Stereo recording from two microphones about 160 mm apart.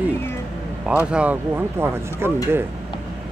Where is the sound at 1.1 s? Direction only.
10° right (ahead or behind).